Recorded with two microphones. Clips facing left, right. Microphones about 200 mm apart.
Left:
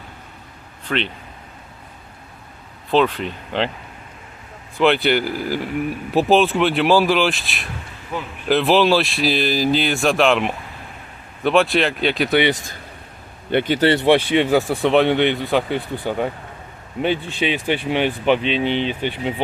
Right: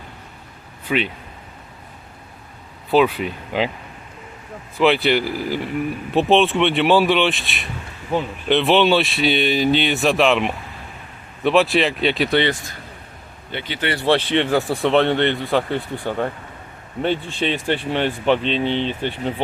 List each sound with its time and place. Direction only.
0.9 s speech: 10° right (ahead or behind)
2.9 s speech: 5° right (ahead or behind)
4.8 s speech: centre (ahead or behind)
8.1 s speech: 30° right (ahead or behind)
8.4 s speech: centre (ahead or behind)
13.5 s a man's voice: 55° left (ahead or behind)
13.9 s speech: 15° left (ahead or behind)
14.7 s speech: centre (ahead or behind)